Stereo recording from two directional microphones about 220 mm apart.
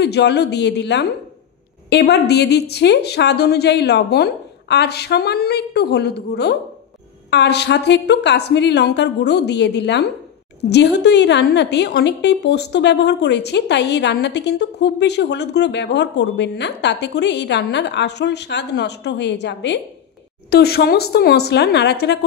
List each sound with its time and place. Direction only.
0.0 s a woman's voice: 50° left (ahead or behind)